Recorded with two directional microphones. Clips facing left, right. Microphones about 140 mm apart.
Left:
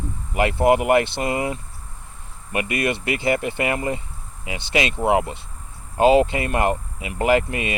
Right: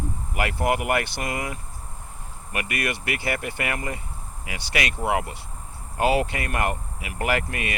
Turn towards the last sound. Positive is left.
turn(degrees=20)  # may be behind; listen again after turning